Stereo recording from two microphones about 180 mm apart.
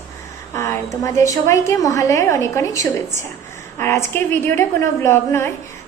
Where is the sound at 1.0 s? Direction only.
15° left (ahead or behind).